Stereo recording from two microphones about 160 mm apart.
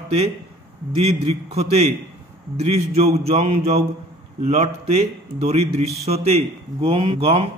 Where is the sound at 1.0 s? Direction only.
40° right (ahead or behind).